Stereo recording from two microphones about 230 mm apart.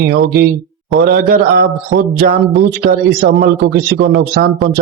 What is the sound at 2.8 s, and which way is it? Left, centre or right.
Speech, right.